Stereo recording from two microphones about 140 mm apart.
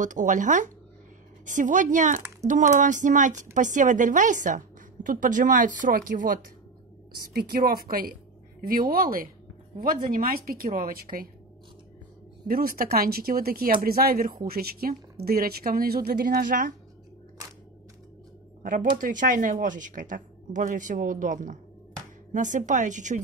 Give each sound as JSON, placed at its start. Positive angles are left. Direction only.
{"t": 0.0, "sound": "a woman's voice", "side_deg": -65}
{"t": 7.2, "sound": "a woman's voice", "side_deg": -90}
{"t": 12.4, "sound": "speech", "side_deg": -90}
{"t": 18.6, "sound": "a woman's voice", "side_deg": -70}